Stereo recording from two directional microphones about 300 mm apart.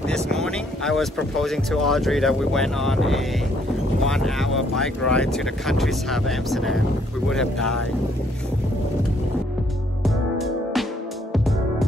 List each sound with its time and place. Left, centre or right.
0.1 s vehicle: centre
1.3 s speech: centre
10.0 s music: centre